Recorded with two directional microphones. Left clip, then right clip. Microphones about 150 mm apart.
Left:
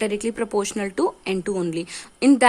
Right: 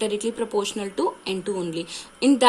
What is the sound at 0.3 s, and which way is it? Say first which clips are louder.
Speech: left 1 dB; 45° left (ahead or behind).